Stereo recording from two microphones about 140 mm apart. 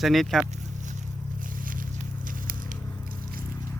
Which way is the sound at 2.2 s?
75° right (ahead or behind).